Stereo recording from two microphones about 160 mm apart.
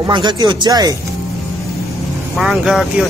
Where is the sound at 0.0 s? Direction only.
30° right (ahead or behind).